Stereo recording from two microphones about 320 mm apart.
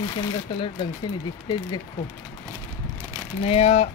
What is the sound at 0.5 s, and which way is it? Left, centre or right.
Speech, centre.